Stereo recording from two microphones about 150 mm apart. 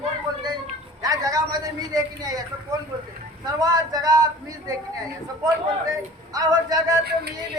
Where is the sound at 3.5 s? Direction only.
25° right (ahead or behind).